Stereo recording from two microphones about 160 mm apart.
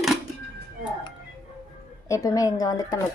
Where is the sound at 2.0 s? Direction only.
20° left (ahead or behind).